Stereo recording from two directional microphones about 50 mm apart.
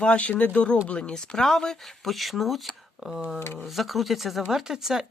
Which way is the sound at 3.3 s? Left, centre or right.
Left.